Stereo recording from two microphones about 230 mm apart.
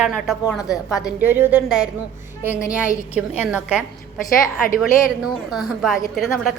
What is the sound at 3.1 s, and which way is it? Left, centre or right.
Speech, left.